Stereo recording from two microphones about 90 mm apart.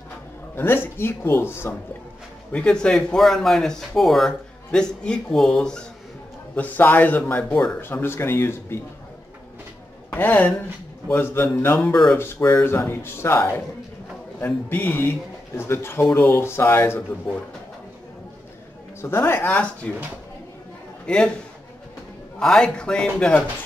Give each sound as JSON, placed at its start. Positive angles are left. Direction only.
{"t": 0.6, "sound": "speech", "side_deg": 25}
{"t": 2.5, "sound": "speech", "side_deg": 10}
{"t": 6.5, "sound": "speech", "side_deg": 20}
{"t": 7.8, "sound": "speech", "side_deg": 25}
{"t": 10.1, "sound": "speech", "side_deg": 20}
{"t": 11.8, "sound": "speech", "side_deg": 5}
{"t": 12.2, "sound": "speech", "side_deg": 30}
{"t": 18.9, "sound": "speech", "side_deg": 25}
{"t": 21.0, "sound": "a man's voice", "side_deg": 10}
{"t": 22.4, "sound": "speech", "side_deg": 10}